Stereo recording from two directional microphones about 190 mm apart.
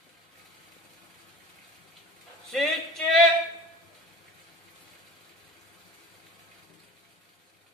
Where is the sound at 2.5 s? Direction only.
Centre (ahead or behind).